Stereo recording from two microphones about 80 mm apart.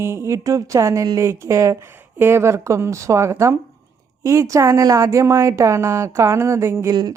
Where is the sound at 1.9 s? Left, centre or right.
Right.